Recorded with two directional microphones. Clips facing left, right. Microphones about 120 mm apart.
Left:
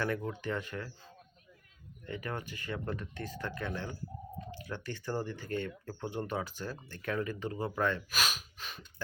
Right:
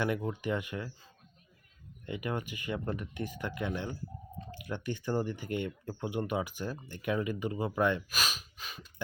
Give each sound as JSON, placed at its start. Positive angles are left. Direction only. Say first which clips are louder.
{"t": 0.0, "sound": "speech", "louder": "right 2 dB", "side_deg": -15}
{"t": 2.0, "sound": "speech", "louder": "right 3 dB", "side_deg": -15}
{"t": 8.1, "sound": "gasp", "louder": "left 1 dB", "side_deg": 0}